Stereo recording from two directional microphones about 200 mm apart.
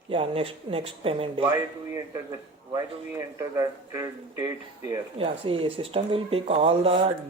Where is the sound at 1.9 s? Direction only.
15° right (ahead or behind).